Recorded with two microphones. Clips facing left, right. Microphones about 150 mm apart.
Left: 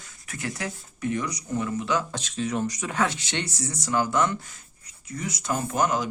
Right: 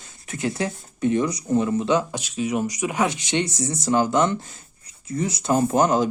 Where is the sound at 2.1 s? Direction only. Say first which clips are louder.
Right 4 dB; 10° right (ahead or behind).